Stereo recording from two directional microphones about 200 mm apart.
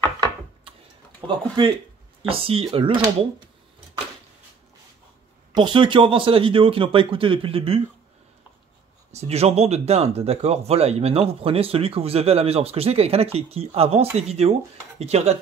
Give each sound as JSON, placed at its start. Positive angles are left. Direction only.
{"t": 2.2, "sound": "speech", "side_deg": -25}
{"t": 5.5, "sound": "speech", "side_deg": -25}
{"t": 9.1, "sound": "speech", "side_deg": -30}